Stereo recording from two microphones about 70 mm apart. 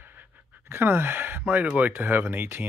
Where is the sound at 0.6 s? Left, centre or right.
Right.